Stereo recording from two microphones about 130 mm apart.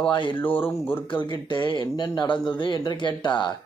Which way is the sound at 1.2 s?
35° left (ahead or behind).